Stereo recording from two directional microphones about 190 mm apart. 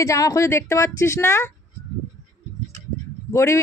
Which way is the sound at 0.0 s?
15° left (ahead or behind).